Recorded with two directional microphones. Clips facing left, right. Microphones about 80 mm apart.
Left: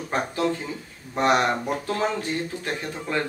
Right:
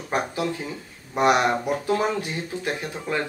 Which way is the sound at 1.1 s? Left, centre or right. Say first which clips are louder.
Right 1 dB; centre.